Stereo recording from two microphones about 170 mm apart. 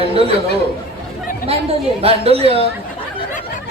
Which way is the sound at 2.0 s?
35° right (ahead or behind).